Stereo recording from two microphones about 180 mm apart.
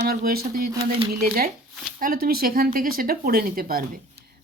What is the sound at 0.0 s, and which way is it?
Speech, 60° right (ahead or behind).